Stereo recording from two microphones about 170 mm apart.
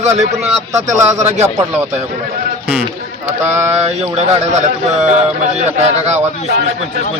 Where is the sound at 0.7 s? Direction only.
20° right (ahead or behind).